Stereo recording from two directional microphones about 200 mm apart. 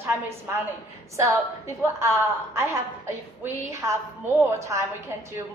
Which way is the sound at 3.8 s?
15° right (ahead or behind).